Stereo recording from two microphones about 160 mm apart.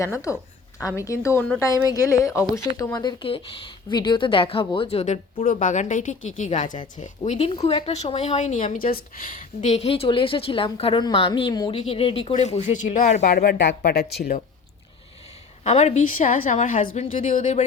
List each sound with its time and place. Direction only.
0.0 s a woman's voice: 20° left (ahead or behind); by 9.4 s 60° left (ahead or behind)
9.6 s speech: 45° left (ahead or behind)
12.3 s a woman's voice: 45° left (ahead or behind)
13.3 s speech: 80° left
15.6 s a woman's voice: 45° left (ahead or behind)